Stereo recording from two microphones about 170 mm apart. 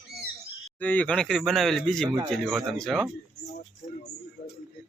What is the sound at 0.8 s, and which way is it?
Speech, 10° left (ahead or behind).